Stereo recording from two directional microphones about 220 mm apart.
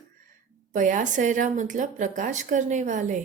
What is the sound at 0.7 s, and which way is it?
A woman's voice, 35° right (ahead or behind).